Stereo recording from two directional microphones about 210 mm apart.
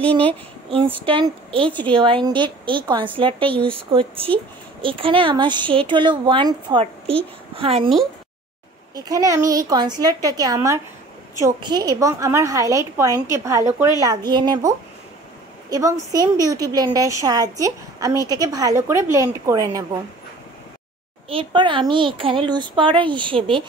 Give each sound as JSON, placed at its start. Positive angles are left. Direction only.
{"t": 0.7, "sound": "speech", "side_deg": -25}
{"t": 8.9, "sound": "a woman's voice", "side_deg": -15}
{"t": 21.3, "sound": "speech", "side_deg": -25}